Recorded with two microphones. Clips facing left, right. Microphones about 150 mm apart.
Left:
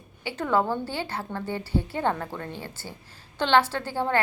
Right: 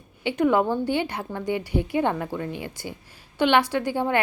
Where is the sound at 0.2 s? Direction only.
20° right (ahead or behind).